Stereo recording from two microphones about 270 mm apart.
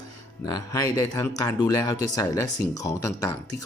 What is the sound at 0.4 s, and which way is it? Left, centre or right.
Speech, centre.